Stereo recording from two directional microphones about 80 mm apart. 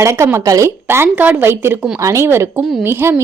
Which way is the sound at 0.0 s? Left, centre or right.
Right.